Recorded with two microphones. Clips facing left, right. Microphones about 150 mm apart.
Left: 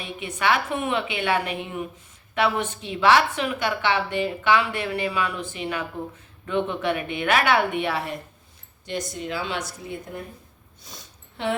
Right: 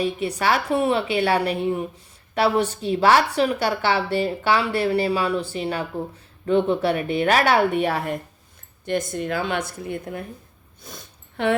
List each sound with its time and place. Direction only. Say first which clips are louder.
0.0 s speech: right 4 dB; 35° right (ahead or behind); by 10.0 s 55° right (ahead or behind)
10.8 s sniff: right 4 dB; 55° right (ahead or behind)